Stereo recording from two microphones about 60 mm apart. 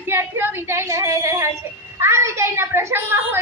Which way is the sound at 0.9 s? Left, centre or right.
Right.